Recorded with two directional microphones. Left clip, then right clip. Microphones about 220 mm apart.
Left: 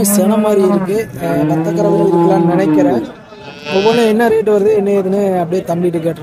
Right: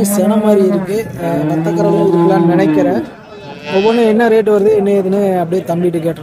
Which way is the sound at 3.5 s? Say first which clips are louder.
Even; 50° left (ahead or behind).